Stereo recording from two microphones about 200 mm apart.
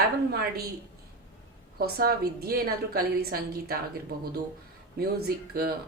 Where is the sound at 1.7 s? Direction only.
50° right (ahead or behind).